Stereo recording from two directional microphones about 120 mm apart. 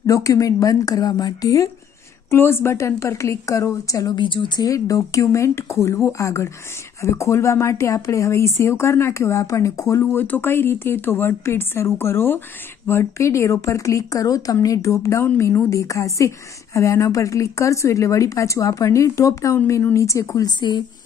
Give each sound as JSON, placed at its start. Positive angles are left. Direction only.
{"t": 0.0, "sound": "speech", "side_deg": 30}
{"t": 4.6, "sound": "speech", "side_deg": 30}